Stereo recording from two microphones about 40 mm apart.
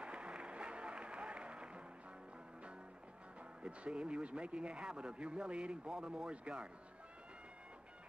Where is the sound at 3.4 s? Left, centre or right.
Right.